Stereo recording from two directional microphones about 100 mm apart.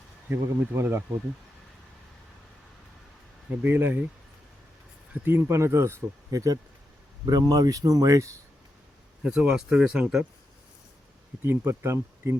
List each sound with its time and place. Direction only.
0.3 s speech: 20° right (ahead or behind)
3.6 s speech: 20° right (ahead or behind)
5.1 s speech: 20° right (ahead or behind)
9.2 s speech: 10° right (ahead or behind)
11.4 s speech: 25° right (ahead or behind)